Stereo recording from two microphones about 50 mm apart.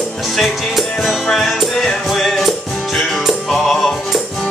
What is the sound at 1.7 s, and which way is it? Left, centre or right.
Music, centre.